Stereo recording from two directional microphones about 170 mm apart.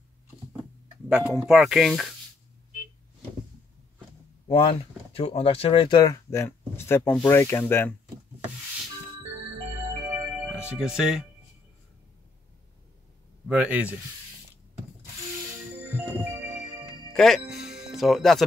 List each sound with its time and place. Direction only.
1.0 s a sound: 5° right (ahead or behind)
1.4 s speech: 5° right (ahead or behind)
4.5 s speech: 35° left (ahead or behind); by 7.9 s 15° left (ahead or behind)
9.9 s music: 20° right (ahead or behind)
10.5 s speech: 5° right (ahead or behind)
13.5 s speech: 10° right (ahead or behind)
17.1 s speech: 5° left (ahead or behind)
17.5 s music: centre (ahead or behind)